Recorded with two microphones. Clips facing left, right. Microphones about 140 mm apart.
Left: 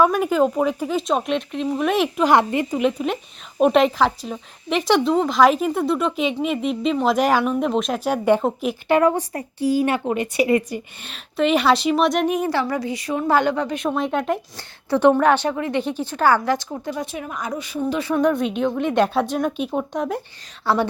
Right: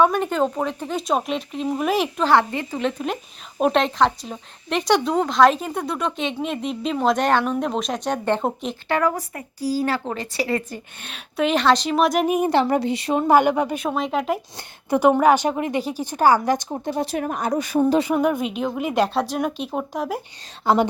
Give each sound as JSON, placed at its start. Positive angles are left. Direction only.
{"t": 0.0, "sound": "a woman's voice", "side_deg": 5}
{"t": 2.2, "sound": "a woman's voice", "side_deg": 20}
{"t": 2.8, "sound": "a woman's voice", "side_deg": 5}
{"t": 8.9, "sound": "speech", "side_deg": 25}
{"t": 11.0, "sound": "a woman's voice", "side_deg": 0}
{"t": 12.5, "sound": "a woman's voice", "side_deg": -25}
{"t": 13.3, "sound": "a woman's voice", "side_deg": -10}
{"t": 14.8, "sound": "a woman's voice", "side_deg": -15}
{"t": 16.6, "sound": "a woman's voice", "side_deg": -30}
{"t": 18.0, "sound": "a woman's voice", "side_deg": -10}
{"t": 20.7, "sound": "speech", "side_deg": -15}